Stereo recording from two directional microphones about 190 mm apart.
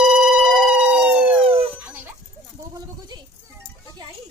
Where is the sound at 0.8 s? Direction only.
5° right (ahead or behind).